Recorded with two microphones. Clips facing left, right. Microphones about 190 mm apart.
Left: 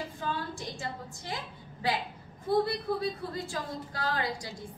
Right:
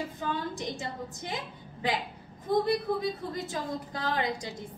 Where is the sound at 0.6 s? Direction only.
20° right (ahead or behind).